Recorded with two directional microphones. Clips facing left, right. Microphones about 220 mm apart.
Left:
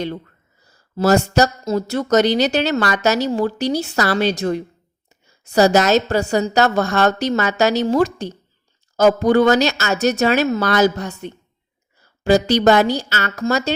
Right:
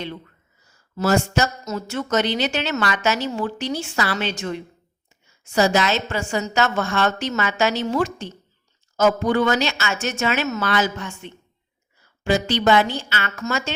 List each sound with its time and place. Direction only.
0.6 s speech: 35° left (ahead or behind)